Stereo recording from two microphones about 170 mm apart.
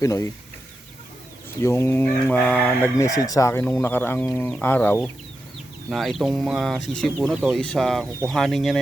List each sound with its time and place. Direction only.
0.0 s speech: 20° left (ahead or behind)
1.6 s speech: 15° left (ahead or behind); by 8.8 s centre (ahead or behind)